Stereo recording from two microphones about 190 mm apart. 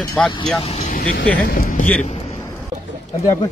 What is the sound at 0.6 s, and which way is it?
Speech, 35° left (ahead or behind).